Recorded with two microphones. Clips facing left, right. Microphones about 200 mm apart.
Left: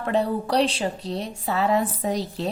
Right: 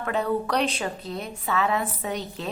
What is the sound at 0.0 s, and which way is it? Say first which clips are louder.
A woman's voice: left 2 dB; 30° left (ahead or behind).